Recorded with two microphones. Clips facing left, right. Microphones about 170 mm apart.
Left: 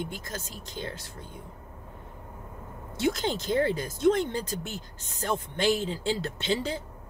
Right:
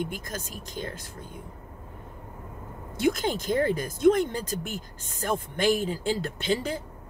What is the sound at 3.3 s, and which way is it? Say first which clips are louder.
Speech: right 1 dB; 50° right (ahead or behind).